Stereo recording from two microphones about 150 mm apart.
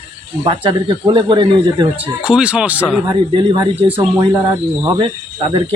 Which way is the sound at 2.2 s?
5° right (ahead or behind).